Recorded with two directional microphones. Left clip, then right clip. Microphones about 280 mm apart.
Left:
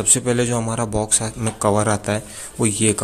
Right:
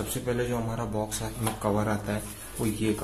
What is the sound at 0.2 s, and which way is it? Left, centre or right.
A man's voice, left.